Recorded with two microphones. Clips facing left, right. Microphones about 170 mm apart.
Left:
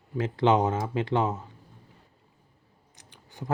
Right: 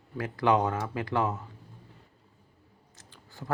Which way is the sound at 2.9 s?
20° left (ahead or behind).